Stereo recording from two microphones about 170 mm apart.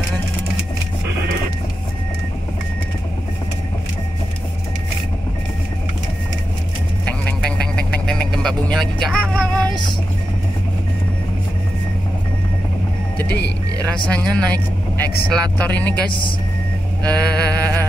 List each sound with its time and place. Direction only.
7.1 s vehicle: 5° left (ahead or behind)
13.8 s speech: 5° left (ahead or behind)
16.1 s speech: 30° left (ahead or behind)
17.0 s music: 5° left (ahead or behind)